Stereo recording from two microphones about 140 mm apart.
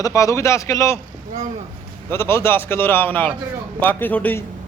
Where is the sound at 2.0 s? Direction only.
15° left (ahead or behind).